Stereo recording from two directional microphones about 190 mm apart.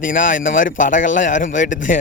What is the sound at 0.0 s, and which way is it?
Speech, 45° left (ahead or behind).